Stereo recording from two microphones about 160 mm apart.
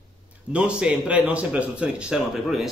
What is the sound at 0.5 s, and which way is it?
Speech, 5° right (ahead or behind).